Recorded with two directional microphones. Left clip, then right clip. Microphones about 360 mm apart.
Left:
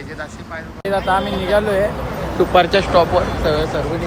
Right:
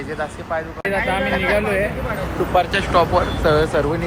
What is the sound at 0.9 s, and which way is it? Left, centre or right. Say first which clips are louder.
Speech: left 3 dB; centre.